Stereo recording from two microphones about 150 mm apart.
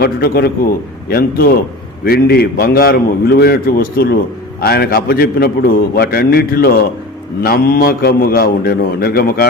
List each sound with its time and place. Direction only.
0.0 s a man's voice: 90° left